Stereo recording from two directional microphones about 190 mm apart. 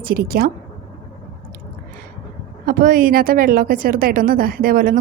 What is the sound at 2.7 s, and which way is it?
A woman's voice, 45° right (ahead or behind).